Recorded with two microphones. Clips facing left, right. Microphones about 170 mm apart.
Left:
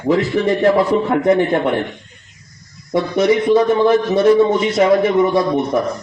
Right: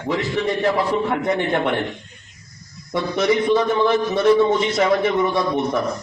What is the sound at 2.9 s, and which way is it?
A man's voice, 45° left (ahead or behind).